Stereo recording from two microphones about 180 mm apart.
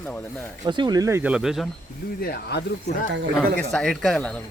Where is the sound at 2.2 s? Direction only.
65° left (ahead or behind).